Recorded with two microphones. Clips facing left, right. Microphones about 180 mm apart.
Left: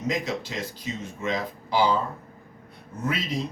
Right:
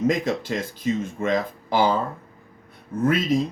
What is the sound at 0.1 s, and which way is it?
A man's voice, 50° right (ahead or behind).